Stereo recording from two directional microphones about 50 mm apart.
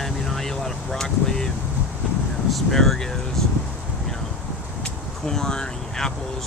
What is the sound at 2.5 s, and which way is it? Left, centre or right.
Speech, centre.